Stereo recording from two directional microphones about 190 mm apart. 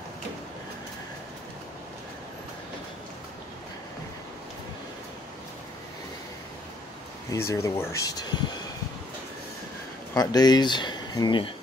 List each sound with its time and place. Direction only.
7.2 s speech: 15° left (ahead or behind)
10.1 s speech: 20° left (ahead or behind)